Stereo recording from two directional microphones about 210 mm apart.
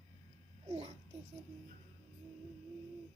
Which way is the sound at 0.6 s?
30° right (ahead or behind).